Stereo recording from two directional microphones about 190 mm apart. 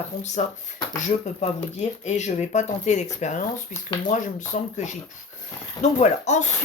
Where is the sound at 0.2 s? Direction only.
40° left (ahead or behind).